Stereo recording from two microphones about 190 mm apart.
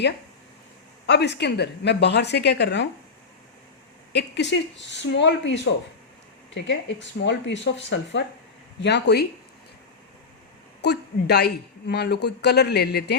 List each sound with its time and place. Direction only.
1.0 s speech: 60° left (ahead or behind)
4.1 s speech: 65° left (ahead or behind)
8.8 s speech: 65° left (ahead or behind)
10.8 s speech: 60° left (ahead or behind)